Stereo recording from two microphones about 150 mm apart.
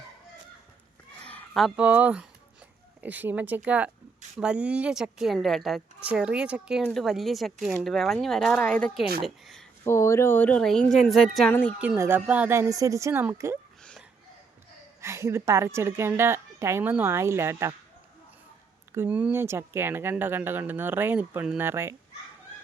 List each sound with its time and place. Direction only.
1.2 s a sound: 10° left (ahead or behind)
1.6 s a woman's voice: 10° right (ahead or behind)
9.8 s a woman's voice: 20° left (ahead or behind); by 11.5 s centre (ahead or behind)
11.8 s speech: 10° right (ahead or behind)
15.0 s speech: 20° right (ahead or behind)
18.9 s speech: 15° right (ahead or behind)